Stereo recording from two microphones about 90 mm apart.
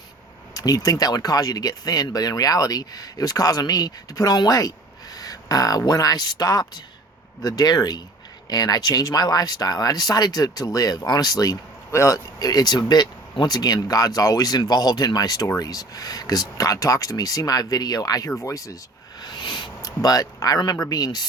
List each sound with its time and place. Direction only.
0.5 s speech: 45° left (ahead or behind)
19.2 s speech: 50° left (ahead or behind)